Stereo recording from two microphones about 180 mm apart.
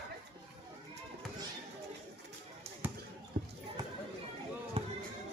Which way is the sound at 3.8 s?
20° right (ahead or behind).